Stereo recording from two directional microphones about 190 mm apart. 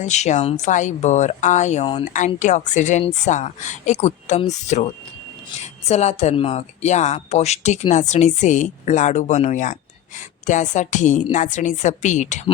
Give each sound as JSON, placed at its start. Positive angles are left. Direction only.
{"t": 0.0, "sound": "speech", "side_deg": 35}
{"t": 5.9, "sound": "speech", "side_deg": 35}